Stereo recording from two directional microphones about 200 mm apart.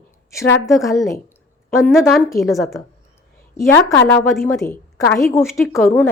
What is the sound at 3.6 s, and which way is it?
A woman's voice, 10° left (ahead or behind).